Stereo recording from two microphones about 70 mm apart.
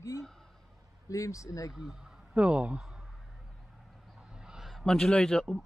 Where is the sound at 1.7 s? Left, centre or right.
Centre.